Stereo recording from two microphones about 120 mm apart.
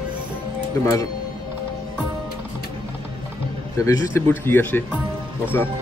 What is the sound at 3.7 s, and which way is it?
Speech, 25° left (ahead or behind).